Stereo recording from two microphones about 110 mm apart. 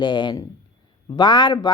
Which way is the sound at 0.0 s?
45° left (ahead or behind).